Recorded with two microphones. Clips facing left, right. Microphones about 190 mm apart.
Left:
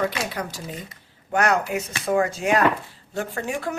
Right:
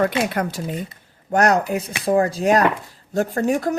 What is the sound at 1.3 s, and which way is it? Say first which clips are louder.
Speech: right 4 dB; 40° right (ahead or behind).